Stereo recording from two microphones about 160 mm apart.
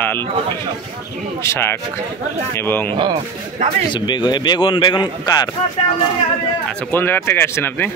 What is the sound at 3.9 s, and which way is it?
A man's voice, 30° left (ahead or behind).